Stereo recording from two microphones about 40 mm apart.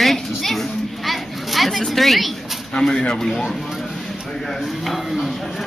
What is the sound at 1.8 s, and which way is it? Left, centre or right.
Speech, centre.